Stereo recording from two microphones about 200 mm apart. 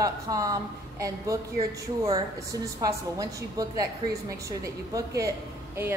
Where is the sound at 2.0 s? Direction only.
15° right (ahead or behind).